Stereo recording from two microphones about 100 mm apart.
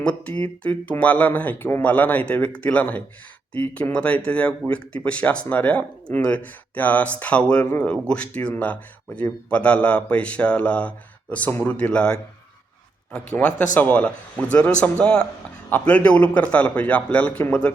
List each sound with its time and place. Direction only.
0.0 s speech: 10° left (ahead or behind)
13.3 s speech: 20° left (ahead or behind)